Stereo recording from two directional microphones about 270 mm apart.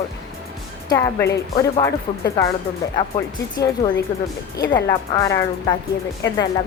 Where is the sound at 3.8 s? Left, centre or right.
Left.